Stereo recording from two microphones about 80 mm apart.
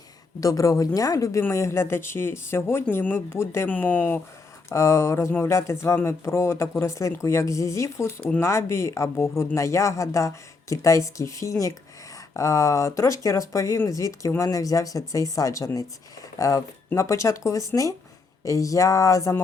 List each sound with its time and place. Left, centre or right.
0.3 s speech: left
1.4 s speech: left
3.7 s speech: left
4.7 s speech: left